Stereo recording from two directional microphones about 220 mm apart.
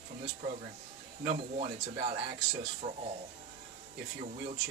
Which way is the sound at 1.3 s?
30° right (ahead or behind).